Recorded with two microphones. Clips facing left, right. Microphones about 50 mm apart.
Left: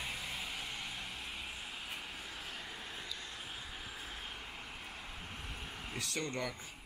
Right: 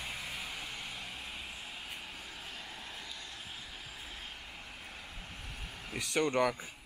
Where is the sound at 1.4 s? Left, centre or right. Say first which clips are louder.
Even; centre.